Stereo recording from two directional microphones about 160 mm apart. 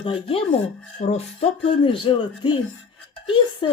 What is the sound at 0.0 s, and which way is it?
Speech, 35° left (ahead or behind).